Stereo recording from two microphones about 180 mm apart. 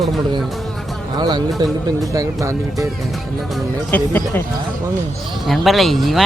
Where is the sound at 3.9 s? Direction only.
10° left (ahead or behind).